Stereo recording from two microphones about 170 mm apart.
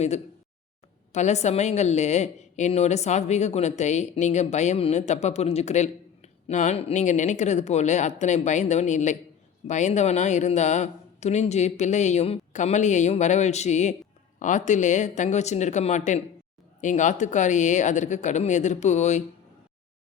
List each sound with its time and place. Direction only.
1.1 s a woman's voice: 40° left (ahead or behind)